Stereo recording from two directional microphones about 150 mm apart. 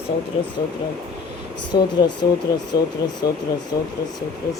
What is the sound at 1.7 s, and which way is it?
Speech, 30° left (ahead or behind).